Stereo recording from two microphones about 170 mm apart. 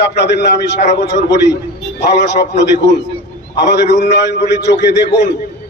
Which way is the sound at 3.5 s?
90° left.